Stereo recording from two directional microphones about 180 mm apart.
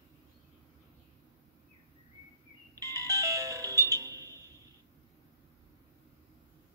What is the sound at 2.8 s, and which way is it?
Music, 20° right (ahead or behind).